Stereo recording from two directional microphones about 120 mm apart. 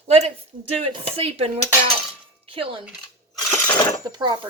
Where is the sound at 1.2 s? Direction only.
55° right (ahead or behind).